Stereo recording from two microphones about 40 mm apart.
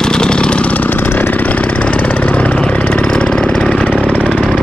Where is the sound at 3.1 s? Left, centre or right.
Left.